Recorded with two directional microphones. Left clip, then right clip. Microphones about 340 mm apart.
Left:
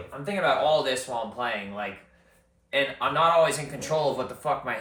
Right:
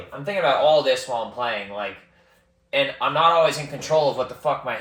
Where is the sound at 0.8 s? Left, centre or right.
Centre.